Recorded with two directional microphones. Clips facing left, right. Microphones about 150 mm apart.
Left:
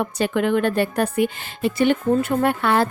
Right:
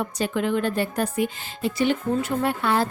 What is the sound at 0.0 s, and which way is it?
A woman's voice, 65° left (ahead or behind).